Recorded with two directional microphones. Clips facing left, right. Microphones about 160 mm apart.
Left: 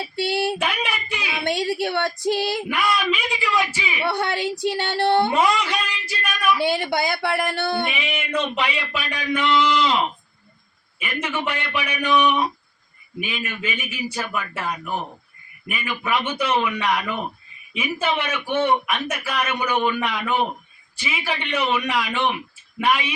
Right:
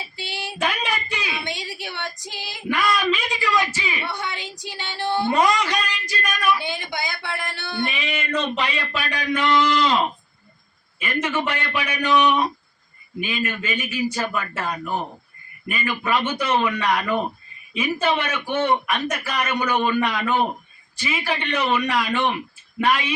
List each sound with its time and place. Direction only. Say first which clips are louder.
0.2 s a woman's voice: left 12 dB; 55° left (ahead or behind)
0.6 s a sound: right 1 dB; 10° left (ahead or behind)
1.5 s a woman's voice: left 10 dB; 60° left (ahead or behind)
2.6 s a man's voice: right 1 dB; 10° left (ahead or behind)
4.0 s a woman's voice: left 7 dB; 60° left (ahead or behind)
5.3 s a man's voice: right 1 dB; 10° left (ahead or behind)
6.6 s a woman's voice: left 8 dB; 60° left (ahead or behind)
7.9 s a man's voice: even; 10° left (ahead or behind)
11.0 s a man's voice: right 2 dB; 10° left (ahead or behind)